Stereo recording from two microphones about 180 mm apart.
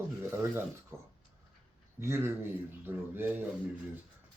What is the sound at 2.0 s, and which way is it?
Speech, 15° right (ahead or behind).